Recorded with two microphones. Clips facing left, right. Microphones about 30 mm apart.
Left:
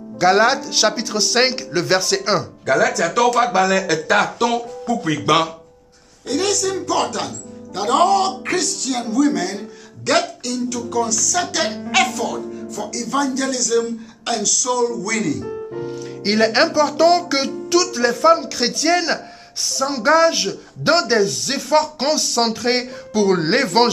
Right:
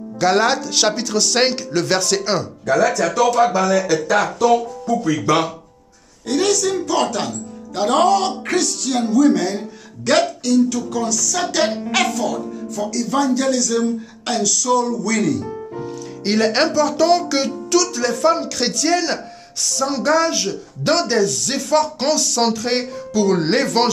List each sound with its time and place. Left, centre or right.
0.2 s speech: centre
3.5 s speech: left
6.2 s speech: centre
16.2 s speech: left
16.4 s speech: centre
18.1 s speech: centre